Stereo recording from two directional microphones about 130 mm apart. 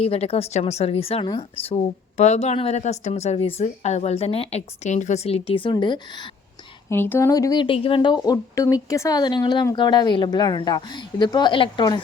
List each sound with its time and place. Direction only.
0.0 s speech: 50° left (ahead or behind)
6.9 s a woman's voice: 15° left (ahead or behind); by 12.0 s 35° left (ahead or behind)